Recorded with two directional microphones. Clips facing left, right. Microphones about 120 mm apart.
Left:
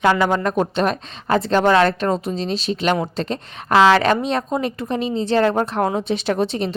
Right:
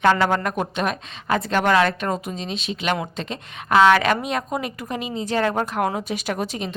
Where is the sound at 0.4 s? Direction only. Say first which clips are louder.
Left 5 dB; 30° left (ahead or behind).